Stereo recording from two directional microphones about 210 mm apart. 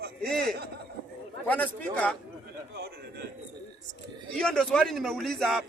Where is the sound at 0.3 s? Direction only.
50° right (ahead or behind).